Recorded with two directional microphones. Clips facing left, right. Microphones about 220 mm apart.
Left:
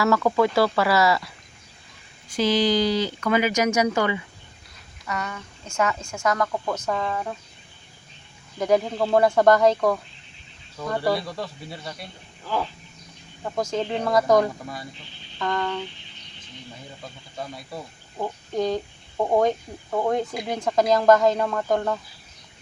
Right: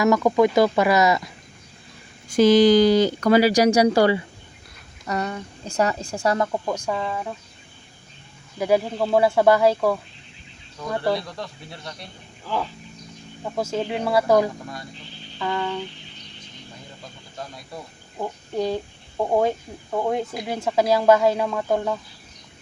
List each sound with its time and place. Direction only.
0.0 s speech: 15° right (ahead or behind)
2.3 s speech: 50° right (ahead or behind); by 6.6 s 25° right (ahead or behind)
6.7 s speech: 10° right (ahead or behind)
8.5 s speech: 5° right (ahead or behind)
13.4 s speech: 5° right (ahead or behind)
17.3 s speech: 5° left (ahead or behind)